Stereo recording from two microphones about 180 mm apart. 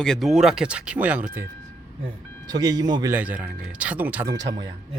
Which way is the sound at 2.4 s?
20° right (ahead or behind).